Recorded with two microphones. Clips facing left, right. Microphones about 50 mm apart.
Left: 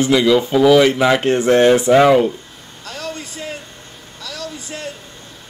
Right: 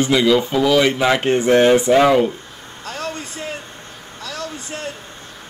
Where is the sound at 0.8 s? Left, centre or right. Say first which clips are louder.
Left 3 dB; centre.